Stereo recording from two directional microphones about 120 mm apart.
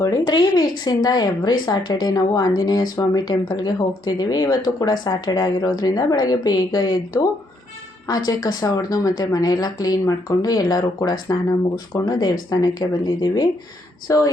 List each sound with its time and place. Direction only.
0.3 s speech: 35° left (ahead or behind)